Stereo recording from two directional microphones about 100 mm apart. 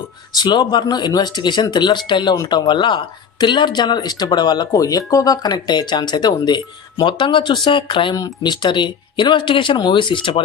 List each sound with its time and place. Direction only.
0.3 s speech: 45° left (ahead or behind)
2.3 s speech: 40° left (ahead or behind); by 8.1 s 55° left (ahead or behind)
8.1 s speech: 40° left (ahead or behind)